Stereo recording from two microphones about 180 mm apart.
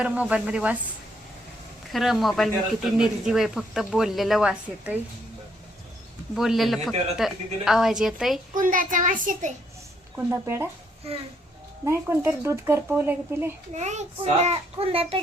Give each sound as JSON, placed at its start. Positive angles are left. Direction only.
{"t": 0.0, "sound": "speech", "side_deg": -5}
{"t": 1.9, "sound": "a woman's voice", "side_deg": 0}
{"t": 6.3, "sound": "a woman's voice", "side_deg": 0}
{"t": 8.5, "sound": "a child's voice", "side_deg": -50}
{"t": 10.4, "sound": "speech", "side_deg": -15}
{"t": 11.9, "sound": "speech", "side_deg": -15}
{"t": 13.7, "sound": "a child's voice", "side_deg": -40}